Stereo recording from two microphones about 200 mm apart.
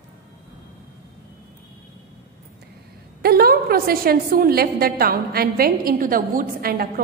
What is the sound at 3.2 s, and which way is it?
A woman's voice, 50° right (ahead or behind).